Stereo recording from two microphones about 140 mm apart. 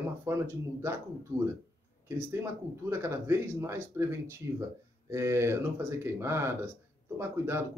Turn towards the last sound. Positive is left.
turn(degrees=-15)  # may be behind; listen again after turning